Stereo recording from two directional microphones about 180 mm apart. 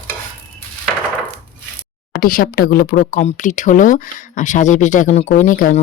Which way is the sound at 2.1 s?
55° left (ahead or behind).